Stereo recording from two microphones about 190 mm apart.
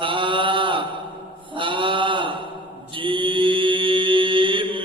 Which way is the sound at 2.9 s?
25° right (ahead or behind).